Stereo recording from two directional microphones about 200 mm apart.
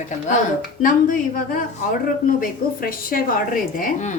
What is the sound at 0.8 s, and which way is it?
A woman's voice, 40° left (ahead or behind).